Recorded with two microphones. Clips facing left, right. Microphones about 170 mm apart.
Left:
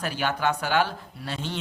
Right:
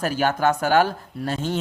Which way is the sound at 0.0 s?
45° right (ahead or behind).